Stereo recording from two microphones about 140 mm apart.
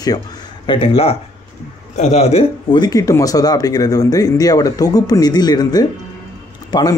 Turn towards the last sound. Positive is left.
turn(degrees=30)  # may be behind; listen again after turning